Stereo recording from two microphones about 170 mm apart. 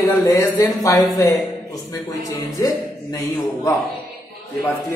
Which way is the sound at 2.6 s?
15° left (ahead or behind).